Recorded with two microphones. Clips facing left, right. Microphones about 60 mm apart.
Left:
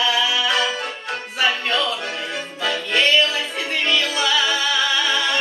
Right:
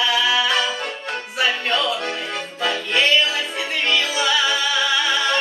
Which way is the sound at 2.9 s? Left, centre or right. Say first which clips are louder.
Left 1 dB; centre.